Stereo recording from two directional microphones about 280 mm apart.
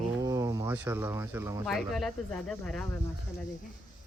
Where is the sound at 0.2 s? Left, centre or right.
Centre.